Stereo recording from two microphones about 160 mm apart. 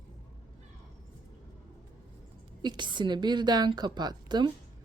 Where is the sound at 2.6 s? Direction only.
30° right (ahead or behind).